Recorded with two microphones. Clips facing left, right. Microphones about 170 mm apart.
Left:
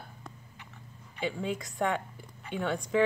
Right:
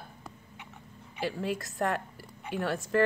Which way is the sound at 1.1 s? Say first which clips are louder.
Right 1 dB; 5° right (ahead or behind).